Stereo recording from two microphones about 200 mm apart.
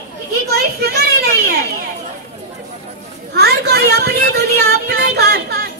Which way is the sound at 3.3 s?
55° right (ahead or behind).